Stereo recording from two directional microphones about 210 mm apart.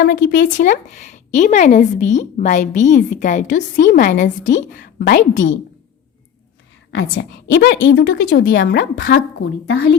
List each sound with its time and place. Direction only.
0.0 s a woman's voice: 55° left (ahead or behind)
0.3 s a woman's voice: 40° left (ahead or behind)
4.8 s a woman's voice: 45° left (ahead or behind)
6.9 s a woman's voice: 65° left (ahead or behind)
8.3 s a woman's voice: 45° left (ahead or behind)